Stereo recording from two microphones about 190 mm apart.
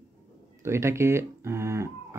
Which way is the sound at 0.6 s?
15° right (ahead or behind).